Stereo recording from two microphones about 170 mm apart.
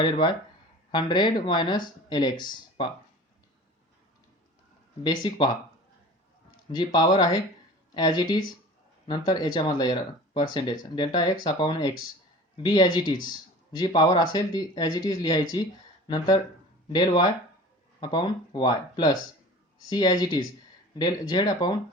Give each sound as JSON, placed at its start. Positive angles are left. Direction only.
{"t": 0.0, "sound": "speech", "side_deg": 30}
{"t": 5.0, "sound": "speech", "side_deg": 25}
{"t": 6.7, "sound": "speech", "side_deg": 25}